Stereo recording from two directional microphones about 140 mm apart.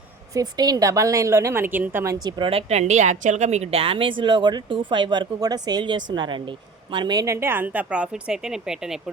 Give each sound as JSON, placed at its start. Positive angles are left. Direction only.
{"t": 0.3, "sound": "a woman's voice", "side_deg": -30}
{"t": 2.2, "sound": "a woman's voice", "side_deg": -30}
{"t": 2.5, "sound": "a woman's voice", "side_deg": -45}